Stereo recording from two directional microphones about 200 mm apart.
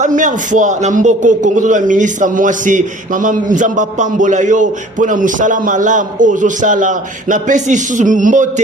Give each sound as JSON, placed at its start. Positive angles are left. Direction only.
{"t": 0.0, "sound": "a man's voice", "side_deg": -40}